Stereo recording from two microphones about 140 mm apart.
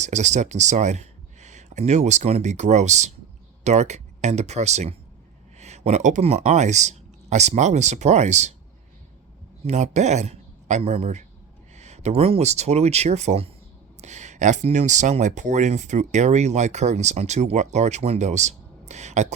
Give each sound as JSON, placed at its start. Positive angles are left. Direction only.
{"t": 0.0, "sound": "speech", "side_deg": -55}
{"t": 9.6, "sound": "speech", "side_deg": -55}